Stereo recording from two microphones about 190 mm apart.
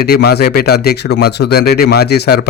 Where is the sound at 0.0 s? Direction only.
55° left (ahead or behind).